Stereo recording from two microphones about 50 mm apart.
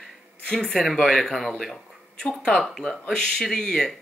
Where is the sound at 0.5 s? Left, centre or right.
Centre.